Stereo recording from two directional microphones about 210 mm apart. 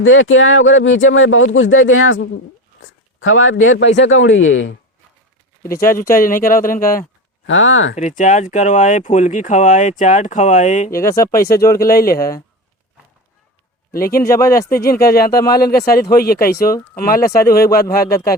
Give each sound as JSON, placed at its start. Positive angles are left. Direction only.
{"t": 0.0, "sound": "speech", "side_deg": 70}
{"t": 5.8, "sound": "speech", "side_deg": 40}
{"t": 7.4, "sound": "speech", "side_deg": 65}
{"t": 7.9, "sound": "speech", "side_deg": 35}
{"t": 10.9, "sound": "speech", "side_deg": 15}
{"t": 11.8, "sound": "speech", "side_deg": 45}
{"t": 12.1, "sound": "speech", "side_deg": 15}
{"t": 13.9, "sound": "a man's voice", "side_deg": 45}
{"t": 14.2, "sound": "speech", "side_deg": 15}
{"t": 14.7, "sound": "speech", "side_deg": 45}
{"t": 15.3, "sound": "speech", "side_deg": 15}
{"t": 16.0, "sound": "speech", "side_deg": 45}